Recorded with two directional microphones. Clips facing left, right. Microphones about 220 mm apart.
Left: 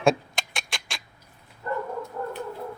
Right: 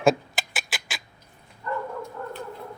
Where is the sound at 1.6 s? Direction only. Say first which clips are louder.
Left 1 dB; 40° left (ahead or behind).